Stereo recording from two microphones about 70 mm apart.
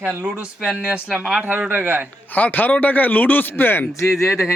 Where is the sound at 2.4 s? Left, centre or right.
Left.